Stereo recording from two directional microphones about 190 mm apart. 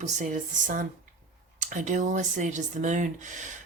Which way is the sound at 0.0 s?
40° right (ahead or behind).